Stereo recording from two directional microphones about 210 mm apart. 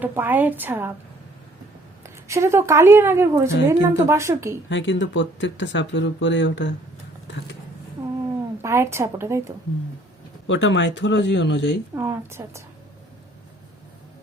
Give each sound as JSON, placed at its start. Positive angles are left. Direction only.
{"t": 0.0, "sound": "a woman's voice", "side_deg": -10}
{"t": 2.0, "sound": "a woman's voice", "side_deg": -15}
{"t": 4.7, "sound": "speech", "side_deg": 60}
{"t": 8.6, "sound": "a woman's voice", "side_deg": -10}
{"t": 10.4, "sound": "speech", "side_deg": 60}
{"t": 11.9, "sound": "a woman's voice", "side_deg": -10}